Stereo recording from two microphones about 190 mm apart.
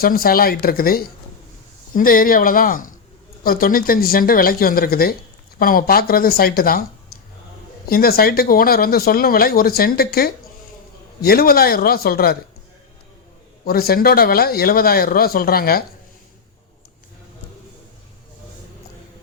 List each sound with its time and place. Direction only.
0.0 s speech: 50° left (ahead or behind)
13.7 s speech: 50° left (ahead or behind)